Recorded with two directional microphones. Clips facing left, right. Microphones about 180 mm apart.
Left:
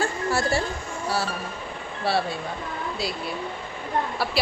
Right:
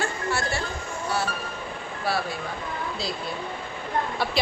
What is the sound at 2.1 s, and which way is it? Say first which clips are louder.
Speech: left 3 dB; 30° left (ahead or behind).